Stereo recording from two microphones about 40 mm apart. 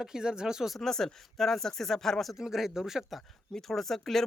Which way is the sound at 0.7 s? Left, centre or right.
Centre.